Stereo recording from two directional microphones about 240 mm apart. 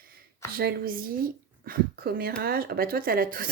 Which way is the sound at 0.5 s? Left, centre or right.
Right.